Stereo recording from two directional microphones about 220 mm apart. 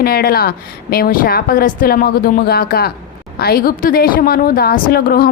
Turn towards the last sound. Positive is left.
turn(degrees=40)  # may be behind; listen again after turning